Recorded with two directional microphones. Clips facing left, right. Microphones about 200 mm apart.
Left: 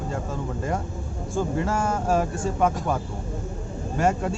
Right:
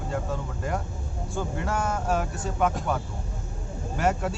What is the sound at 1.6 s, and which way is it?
Speech, centre (ahead or behind).